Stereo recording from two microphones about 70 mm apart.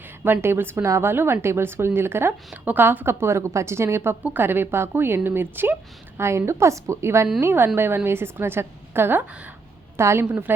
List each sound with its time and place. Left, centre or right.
0.3 s a woman's voice: right
10.0 s a woman's voice: right
10.2 s a woman's voice: right